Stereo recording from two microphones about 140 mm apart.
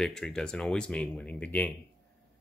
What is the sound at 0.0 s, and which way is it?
Speech, 5° left (ahead or behind).